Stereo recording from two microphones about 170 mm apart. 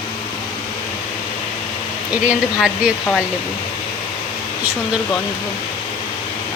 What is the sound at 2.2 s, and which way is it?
Speech, 5° right (ahead or behind).